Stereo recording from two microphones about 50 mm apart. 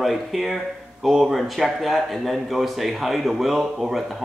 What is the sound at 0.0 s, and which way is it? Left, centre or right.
Speech, centre.